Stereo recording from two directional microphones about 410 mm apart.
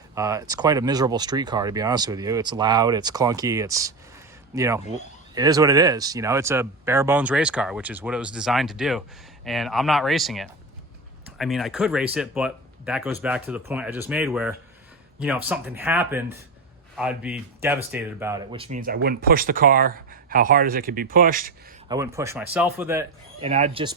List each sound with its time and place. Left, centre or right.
0.1 s speech: centre
21.9 s speech: centre